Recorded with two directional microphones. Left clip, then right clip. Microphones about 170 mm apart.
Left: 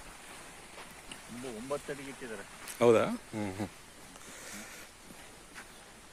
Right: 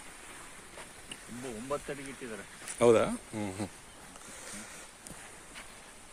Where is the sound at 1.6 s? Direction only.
55° right (ahead or behind).